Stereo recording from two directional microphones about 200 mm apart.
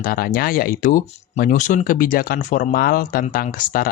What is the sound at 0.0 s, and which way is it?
Speech, 45° left (ahead or behind).